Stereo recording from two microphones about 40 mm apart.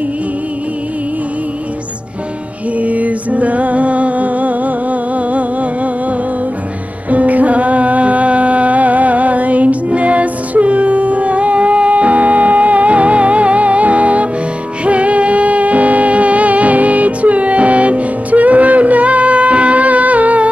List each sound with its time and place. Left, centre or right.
2.8 s music: right
7.1 s music: right